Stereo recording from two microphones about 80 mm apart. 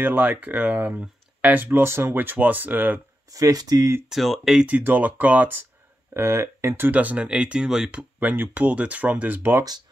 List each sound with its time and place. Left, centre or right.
0.0 s speech: right
3.3 s speech: right
4.1 s speech: centre
4.6 s speech: right
6.9 s speech: centre
8.2 s speech: right